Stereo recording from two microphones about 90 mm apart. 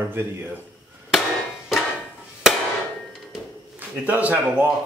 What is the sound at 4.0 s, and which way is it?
Speech, 15° right (ahead or behind).